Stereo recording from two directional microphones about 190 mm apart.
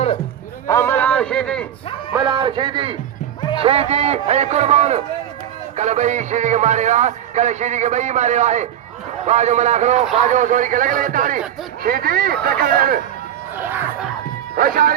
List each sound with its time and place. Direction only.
0.7 s a sound: 10° left (ahead or behind)
2.1 s a man's voice: 20° right (ahead or behind); by 13.0 s 50° right (ahead or behind)
14.5 s a man's voice: 45° right (ahead or behind)